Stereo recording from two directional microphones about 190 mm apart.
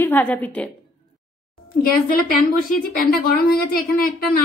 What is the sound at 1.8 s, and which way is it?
A woman's voice, 50° left (ahead or behind).